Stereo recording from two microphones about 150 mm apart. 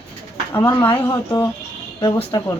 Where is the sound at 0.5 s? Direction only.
15° left (ahead or behind).